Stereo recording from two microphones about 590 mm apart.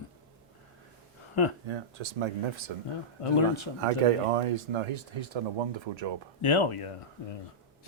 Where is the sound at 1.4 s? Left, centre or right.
Left.